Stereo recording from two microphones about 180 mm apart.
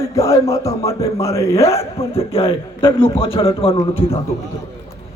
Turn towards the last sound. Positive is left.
turn(degrees=30)  # may be behind; listen again after turning